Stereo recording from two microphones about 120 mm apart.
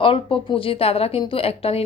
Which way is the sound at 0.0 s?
50° left (ahead or behind).